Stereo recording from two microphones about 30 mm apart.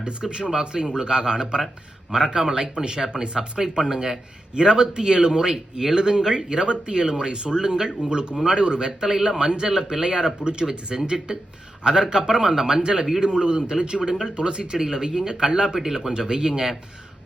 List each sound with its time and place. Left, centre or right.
0.0 s speech: right
12.8 s speech: right
14.8 s speech: centre